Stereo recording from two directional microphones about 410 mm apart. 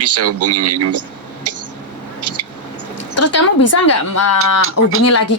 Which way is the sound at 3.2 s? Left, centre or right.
Left.